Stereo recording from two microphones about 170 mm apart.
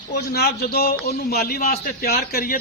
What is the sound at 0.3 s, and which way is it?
A man's voice, 70° left (ahead or behind).